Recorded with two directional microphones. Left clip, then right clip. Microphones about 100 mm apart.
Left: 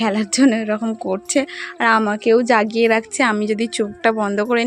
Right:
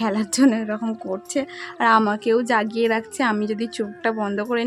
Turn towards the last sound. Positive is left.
turn(degrees=30)  # may be behind; listen again after turning